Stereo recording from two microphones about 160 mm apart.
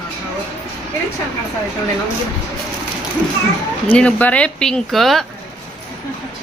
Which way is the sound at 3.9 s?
10° left (ahead or behind).